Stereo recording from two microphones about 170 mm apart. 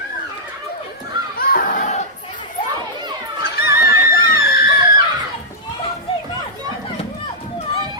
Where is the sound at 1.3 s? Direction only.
55° left (ahead or behind).